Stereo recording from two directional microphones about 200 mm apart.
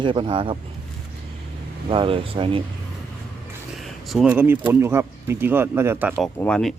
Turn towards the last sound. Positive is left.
turn(degrees=5)  # may be behind; listen again after turning